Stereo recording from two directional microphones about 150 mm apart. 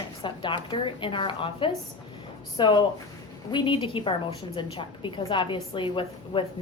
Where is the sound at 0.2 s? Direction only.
30° left (ahead or behind).